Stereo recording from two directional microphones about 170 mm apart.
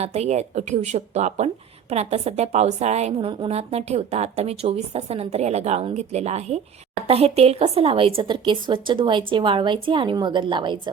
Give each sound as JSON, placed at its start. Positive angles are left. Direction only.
{"t": 0.0, "sound": "a woman's voice", "side_deg": -40}